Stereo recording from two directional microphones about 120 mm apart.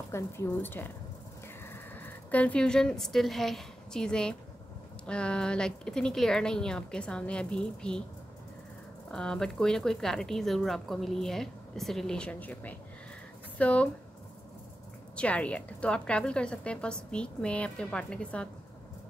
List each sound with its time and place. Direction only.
0.1 s a woman's voice: 20° left (ahead or behind)
2.3 s a woman's voice: 10° left (ahead or behind)
9.1 s speech: 5° left (ahead or behind)
15.1 s a woman's voice: 10° left (ahead or behind)